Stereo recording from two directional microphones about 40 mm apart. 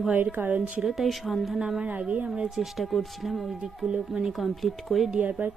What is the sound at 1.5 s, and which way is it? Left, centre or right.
Speech, centre.